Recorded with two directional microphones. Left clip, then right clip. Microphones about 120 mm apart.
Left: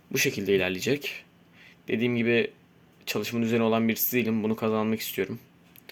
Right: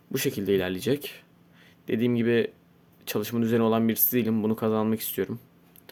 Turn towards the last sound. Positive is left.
turn(degrees=-45)  # may be behind; listen again after turning